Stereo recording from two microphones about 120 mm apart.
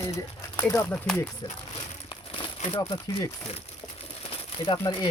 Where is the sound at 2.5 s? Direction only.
75° left (ahead or behind).